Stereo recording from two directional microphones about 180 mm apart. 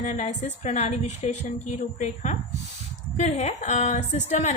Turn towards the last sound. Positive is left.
turn(degrees=40)  # may be behind; listen again after turning